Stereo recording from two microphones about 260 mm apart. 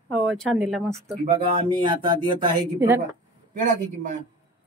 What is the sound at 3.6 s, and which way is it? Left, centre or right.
Speech, right.